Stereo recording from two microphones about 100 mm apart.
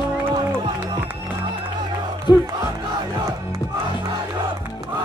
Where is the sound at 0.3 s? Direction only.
45° right (ahead or behind).